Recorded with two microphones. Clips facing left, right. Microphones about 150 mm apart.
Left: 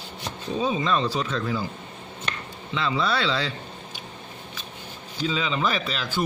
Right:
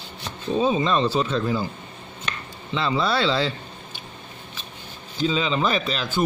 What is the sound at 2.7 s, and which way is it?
Speech, 30° right (ahead or behind).